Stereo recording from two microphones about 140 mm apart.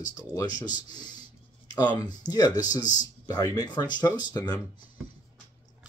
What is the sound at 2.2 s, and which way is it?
Speech, 30° left (ahead or behind).